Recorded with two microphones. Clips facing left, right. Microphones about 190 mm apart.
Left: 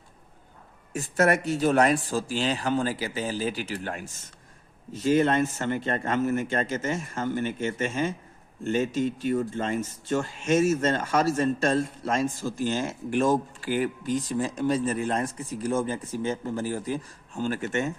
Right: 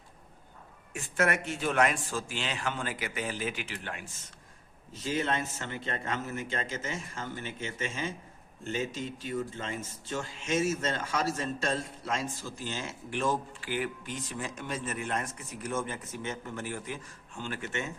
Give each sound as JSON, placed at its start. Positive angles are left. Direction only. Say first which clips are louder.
{"t": 0.9, "sound": "speech", "louder": "left 6 dB", "side_deg": 40}
{"t": 5.0, "sound": "a man's voice", "louder": "left 9 dB", "side_deg": 50}